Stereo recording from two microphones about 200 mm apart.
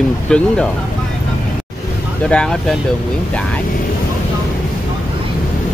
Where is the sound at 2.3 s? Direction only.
5° left (ahead or behind).